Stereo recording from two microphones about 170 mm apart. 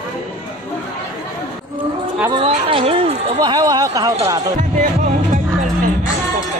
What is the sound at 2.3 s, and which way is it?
Speech, 35° right (ahead or behind).